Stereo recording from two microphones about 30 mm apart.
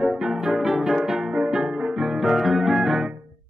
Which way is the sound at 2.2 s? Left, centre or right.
Centre.